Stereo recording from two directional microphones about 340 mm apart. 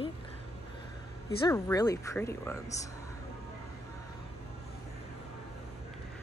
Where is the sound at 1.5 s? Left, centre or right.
Centre.